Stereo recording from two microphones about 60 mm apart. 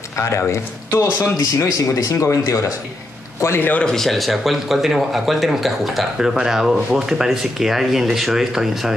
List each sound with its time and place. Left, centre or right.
0.2 s a man's voice: left
3.8 s speech: centre